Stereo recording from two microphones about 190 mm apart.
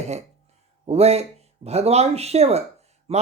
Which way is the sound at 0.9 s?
35° right (ahead or behind).